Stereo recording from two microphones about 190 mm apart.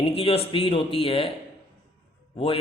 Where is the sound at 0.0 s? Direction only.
30° left (ahead or behind).